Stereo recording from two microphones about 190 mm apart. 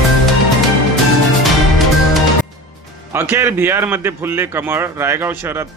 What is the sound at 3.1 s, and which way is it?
A man's voice, 10° right (ahead or behind).